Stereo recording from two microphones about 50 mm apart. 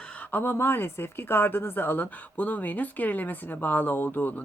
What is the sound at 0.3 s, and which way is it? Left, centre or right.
Speech, left.